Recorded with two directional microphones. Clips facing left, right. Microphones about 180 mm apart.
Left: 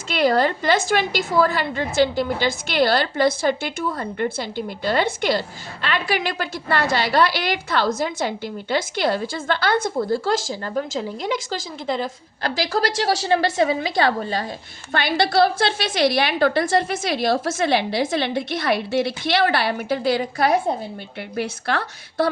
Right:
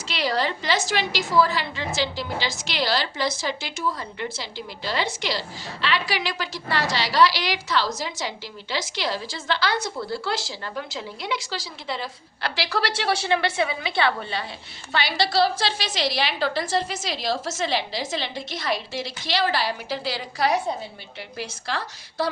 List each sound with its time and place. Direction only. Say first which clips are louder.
0.1 s a woman's voice: left 7 dB; 50° left (ahead or behind)
14.9 s a woman's voice: left 4 dB; 55° left (ahead or behind)